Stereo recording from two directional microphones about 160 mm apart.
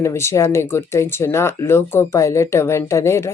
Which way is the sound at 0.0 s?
15° left (ahead or behind).